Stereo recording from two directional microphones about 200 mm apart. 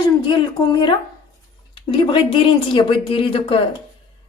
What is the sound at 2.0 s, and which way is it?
Speech, 25° left (ahead or behind).